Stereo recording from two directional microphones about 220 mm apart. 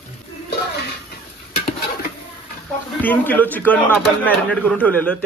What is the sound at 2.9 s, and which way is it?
A man's voice, 10° left (ahead or behind).